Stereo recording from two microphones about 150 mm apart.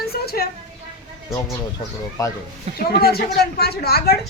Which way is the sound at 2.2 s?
25° left (ahead or behind).